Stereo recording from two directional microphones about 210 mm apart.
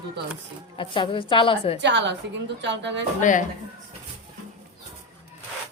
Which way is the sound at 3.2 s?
40° left (ahead or behind).